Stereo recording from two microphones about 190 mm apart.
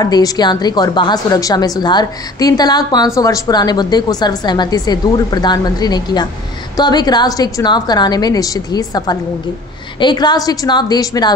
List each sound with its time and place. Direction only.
0.0 s a woman's voice: 20° left (ahead or behind)